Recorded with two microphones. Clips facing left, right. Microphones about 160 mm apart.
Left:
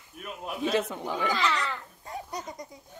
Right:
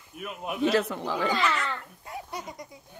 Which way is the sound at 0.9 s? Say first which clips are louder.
Right 2 dB; 20° left (ahead or behind).